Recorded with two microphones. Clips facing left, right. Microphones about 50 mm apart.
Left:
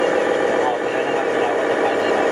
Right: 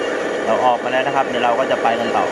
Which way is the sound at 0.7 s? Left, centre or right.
Right.